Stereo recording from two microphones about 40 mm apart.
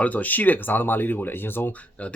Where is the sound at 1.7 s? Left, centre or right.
Left.